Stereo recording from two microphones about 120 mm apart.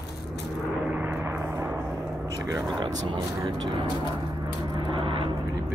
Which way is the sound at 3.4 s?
40° right (ahead or behind).